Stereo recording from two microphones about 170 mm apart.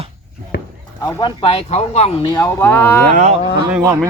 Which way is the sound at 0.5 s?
80° left.